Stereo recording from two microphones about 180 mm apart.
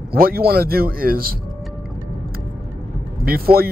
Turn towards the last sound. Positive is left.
turn(degrees=-55)  # may be behind; listen again after turning